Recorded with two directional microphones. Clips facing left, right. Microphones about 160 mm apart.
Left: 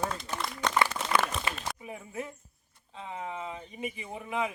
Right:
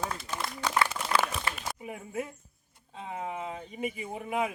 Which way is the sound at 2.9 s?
45° right (ahead or behind).